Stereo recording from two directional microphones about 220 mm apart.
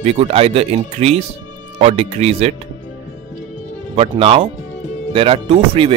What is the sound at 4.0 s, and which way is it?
Speech, 25° right (ahead or behind).